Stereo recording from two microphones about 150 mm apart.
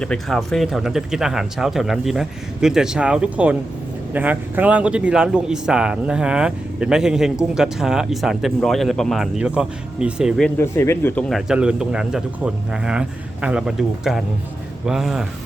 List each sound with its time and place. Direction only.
0.0 s a man's voice: 5° left (ahead or behind)
10.6 s a man's voice: 15° left (ahead or behind); by 15.3 s 5° right (ahead or behind)